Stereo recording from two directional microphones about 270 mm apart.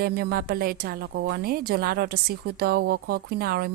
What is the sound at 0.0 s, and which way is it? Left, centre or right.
A woman's voice, right.